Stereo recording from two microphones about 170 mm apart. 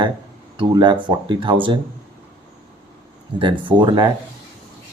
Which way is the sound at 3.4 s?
25° right (ahead or behind).